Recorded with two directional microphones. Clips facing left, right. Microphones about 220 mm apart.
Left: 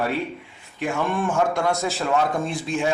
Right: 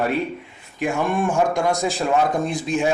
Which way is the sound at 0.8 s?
15° right (ahead or behind).